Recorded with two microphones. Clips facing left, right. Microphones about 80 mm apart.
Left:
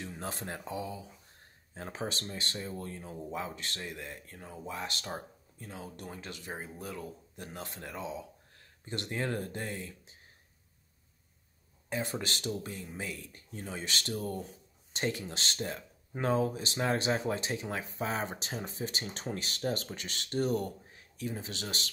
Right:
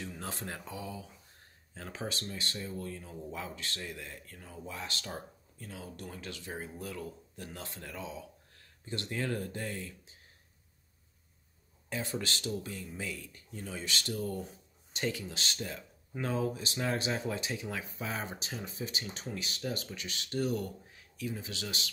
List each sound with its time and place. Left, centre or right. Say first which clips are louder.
0.0 s speech: left 1 dB; left
11.9 s speech: left 1 dB; left
12.6 s speech: even; left